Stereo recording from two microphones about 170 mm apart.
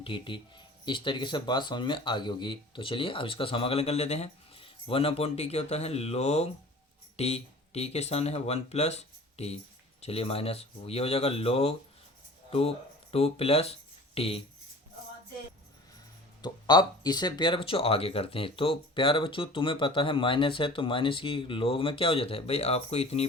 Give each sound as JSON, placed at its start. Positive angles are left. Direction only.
{"t": 0.0, "sound": "speech", "side_deg": 30}
{"t": 16.4, "sound": "speech", "side_deg": 25}